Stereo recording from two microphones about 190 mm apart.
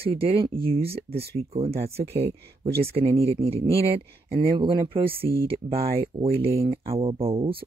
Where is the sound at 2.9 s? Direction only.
30° right (ahead or behind).